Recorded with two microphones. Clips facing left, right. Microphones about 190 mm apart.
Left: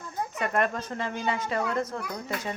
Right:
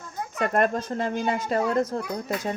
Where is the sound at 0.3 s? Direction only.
40° right (ahead or behind).